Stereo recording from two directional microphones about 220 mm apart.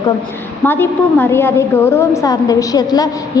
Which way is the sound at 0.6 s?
10° left (ahead or behind).